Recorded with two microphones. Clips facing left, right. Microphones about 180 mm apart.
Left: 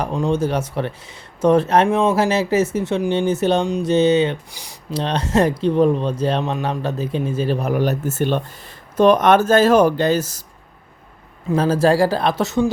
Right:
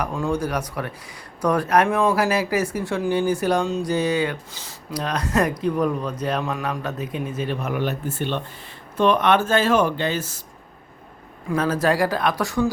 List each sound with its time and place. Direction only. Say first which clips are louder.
0.0 s speech: left 4 dB; 25° left (ahead or behind)
4.9 s speech: left 4 dB; 25° left (ahead or behind)
11.4 s speech: left 5 dB; 30° left (ahead or behind)